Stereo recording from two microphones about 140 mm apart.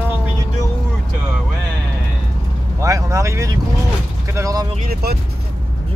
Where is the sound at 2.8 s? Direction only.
20° right (ahead or behind).